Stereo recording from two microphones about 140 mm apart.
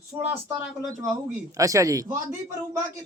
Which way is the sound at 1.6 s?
25° right (ahead or behind).